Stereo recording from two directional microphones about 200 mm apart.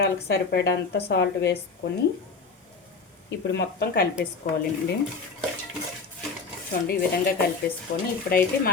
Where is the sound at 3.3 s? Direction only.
55° left (ahead or behind).